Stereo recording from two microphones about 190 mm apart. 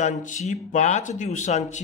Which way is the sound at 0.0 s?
40° left (ahead or behind).